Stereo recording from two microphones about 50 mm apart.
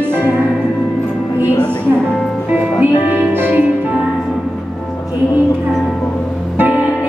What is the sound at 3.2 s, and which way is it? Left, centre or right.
Music, right.